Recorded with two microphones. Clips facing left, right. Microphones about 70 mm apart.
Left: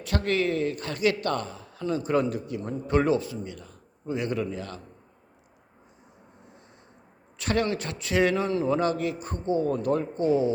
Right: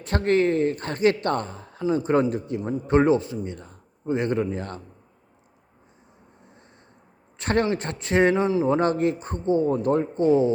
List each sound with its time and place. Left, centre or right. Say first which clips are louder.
0.0 s a man's voice: right 5 dB; right
7.3 s a man's voice: right 3 dB; right
8.4 s speech: right 4 dB; centre
8.6 s a man's voice: right 4 dB; right